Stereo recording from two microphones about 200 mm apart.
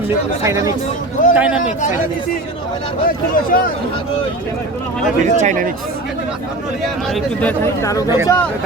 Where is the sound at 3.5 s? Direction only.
45° left (ahead or behind).